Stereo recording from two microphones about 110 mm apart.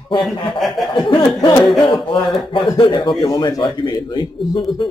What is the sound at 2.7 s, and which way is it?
Speech, 35° left (ahead or behind).